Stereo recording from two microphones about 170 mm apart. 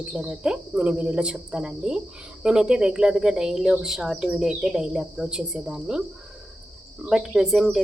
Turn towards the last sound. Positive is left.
turn(degrees=0)  # may be behind; listen again after turning